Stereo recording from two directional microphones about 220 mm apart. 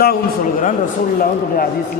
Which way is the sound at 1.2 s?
40° left (ahead or behind).